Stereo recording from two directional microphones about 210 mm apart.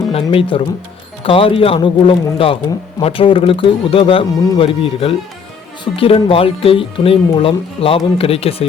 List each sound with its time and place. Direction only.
0.1 s speech: 25° left (ahead or behind)